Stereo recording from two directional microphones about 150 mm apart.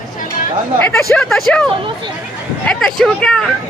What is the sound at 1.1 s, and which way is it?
Speech, 5° left (ahead or behind).